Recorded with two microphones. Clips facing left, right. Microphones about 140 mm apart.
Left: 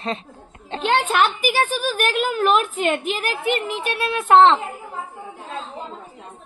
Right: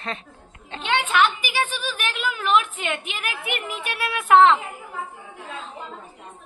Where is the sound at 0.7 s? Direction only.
40° left (ahead or behind).